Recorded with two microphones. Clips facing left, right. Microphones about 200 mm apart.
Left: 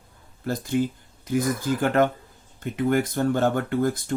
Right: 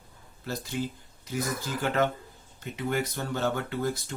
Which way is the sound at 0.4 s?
50° left (ahead or behind).